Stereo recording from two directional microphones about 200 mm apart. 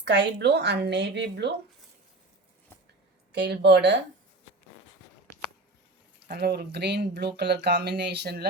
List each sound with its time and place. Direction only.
0.0 s speech: 60° right (ahead or behind)
3.3 s speech: 55° right (ahead or behind)
6.3 s speech: 50° right (ahead or behind)